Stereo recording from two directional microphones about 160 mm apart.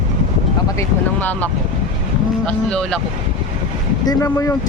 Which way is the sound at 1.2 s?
10° left (ahead or behind).